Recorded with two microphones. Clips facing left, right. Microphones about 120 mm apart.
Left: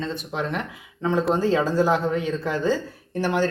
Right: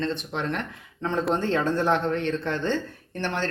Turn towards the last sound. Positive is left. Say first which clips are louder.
# left 6 dB
turn(degrees=10)  # may be behind; listen again after turning